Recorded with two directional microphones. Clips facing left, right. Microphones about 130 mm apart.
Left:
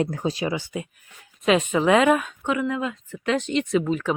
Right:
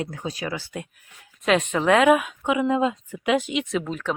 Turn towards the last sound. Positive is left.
turn(degrees=0)  # may be behind; listen again after turning